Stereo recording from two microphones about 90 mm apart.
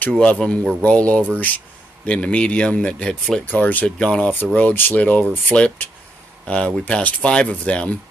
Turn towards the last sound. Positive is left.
turn(degrees=10)  # may be behind; listen again after turning